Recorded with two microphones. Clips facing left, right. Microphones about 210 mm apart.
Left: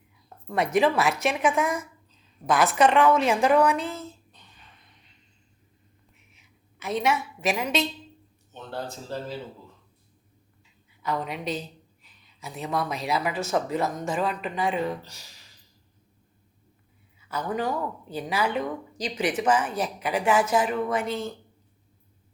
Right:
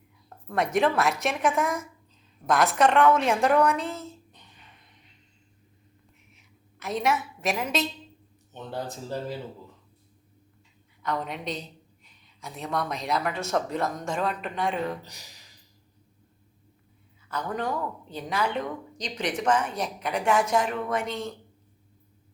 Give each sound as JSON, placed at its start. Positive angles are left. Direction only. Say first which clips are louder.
{"t": 0.3, "sound": "speech", "louder": "left 1 dB", "side_deg": 0}
{"t": 6.3, "sound": "a sound", "louder": "right 2 dB", "side_deg": 0}
{"t": 8.5, "sound": "speech", "louder": "right 1 dB", "side_deg": -15}
{"t": 11.0, "sound": "speech", "louder": "left 1 dB", "side_deg": 5}
{"t": 15.0, "sound": "speech", "louder": "right 1 dB", "side_deg": -15}
{"t": 17.2, "sound": "speech", "louder": "left 2 dB", "side_deg": 5}